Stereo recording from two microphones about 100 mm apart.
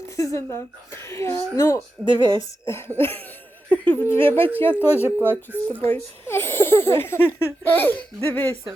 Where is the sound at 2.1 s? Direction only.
50° right (ahead or behind).